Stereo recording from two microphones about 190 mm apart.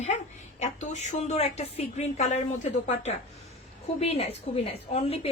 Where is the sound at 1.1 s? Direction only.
35° left (ahead or behind).